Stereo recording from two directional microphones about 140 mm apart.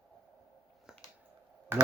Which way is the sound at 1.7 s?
20° right (ahead or behind).